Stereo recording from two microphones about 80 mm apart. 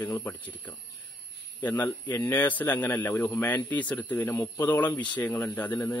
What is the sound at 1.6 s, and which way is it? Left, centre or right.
A man's voice, left.